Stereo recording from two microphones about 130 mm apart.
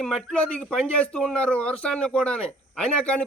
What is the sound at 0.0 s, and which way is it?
Speech, 5° left (ahead or behind).